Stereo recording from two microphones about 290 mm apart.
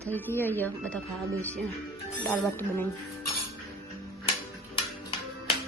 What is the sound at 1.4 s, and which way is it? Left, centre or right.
Music, centre.